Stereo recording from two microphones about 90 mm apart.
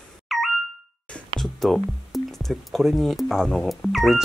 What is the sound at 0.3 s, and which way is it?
Ding, centre (ahead or behind).